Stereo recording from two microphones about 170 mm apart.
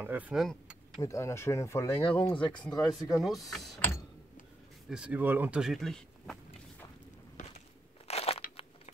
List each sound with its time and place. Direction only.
0.0 s speech: 10° right (ahead or behind)
1.0 s speech: 15° left (ahead or behind)
2.9 s speech: centre (ahead or behind)
4.8 s speech: 5° right (ahead or behind)
8.1 s crunch: 35° left (ahead or behind)